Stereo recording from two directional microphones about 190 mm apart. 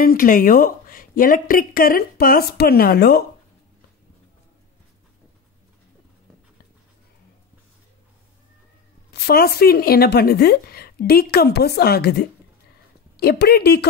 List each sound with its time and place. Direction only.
0.0 s a woman's voice: 50° left (ahead or behind)
9.1 s speech: 55° left (ahead or behind)